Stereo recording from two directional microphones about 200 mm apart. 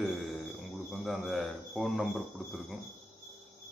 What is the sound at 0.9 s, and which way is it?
Cricket, centre (ahead or behind).